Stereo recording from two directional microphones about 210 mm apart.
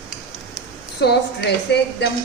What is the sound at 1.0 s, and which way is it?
Speech, 55° left (ahead or behind).